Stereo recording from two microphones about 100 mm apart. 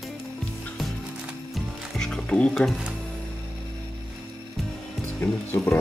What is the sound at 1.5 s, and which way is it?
Music, 5° left (ahead or behind).